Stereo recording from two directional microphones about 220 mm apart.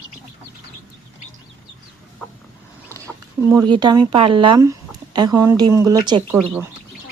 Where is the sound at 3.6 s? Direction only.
20° right (ahead or behind).